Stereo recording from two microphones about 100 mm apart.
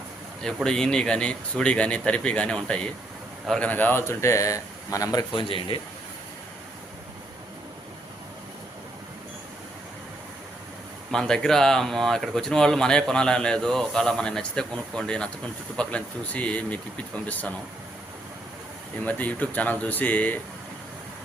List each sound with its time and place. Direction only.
0.4 s a man's voice: 5° left (ahead or behind); by 5.2 s 35° left (ahead or behind)
5.3 s speech: 60° left (ahead or behind)
11.1 s speech: 5° left (ahead or behind)
19.0 s speech: 15° left (ahead or behind)